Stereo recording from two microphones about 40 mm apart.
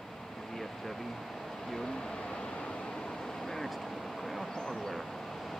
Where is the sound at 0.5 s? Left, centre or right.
Centre.